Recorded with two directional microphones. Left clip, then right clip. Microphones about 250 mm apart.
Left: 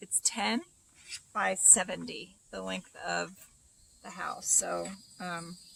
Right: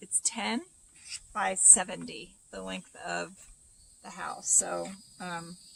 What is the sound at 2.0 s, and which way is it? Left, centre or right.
Speech, centre.